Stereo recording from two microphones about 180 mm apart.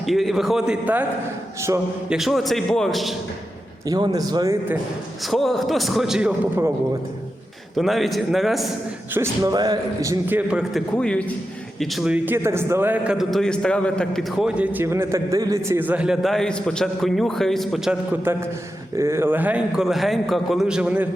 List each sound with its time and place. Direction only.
0.0 s a man's voice: centre (ahead or behind)
1.7 s a man's voice: 15° right (ahead or behind)
2.0 s a man's voice: centre (ahead or behind)
3.8 s speech: 20° right (ahead or behind)
5.2 s a man's voice: centre (ahead or behind)
7.8 s a man's voice: centre (ahead or behind)
9.1 s a man's voice: 15° right (ahead or behind)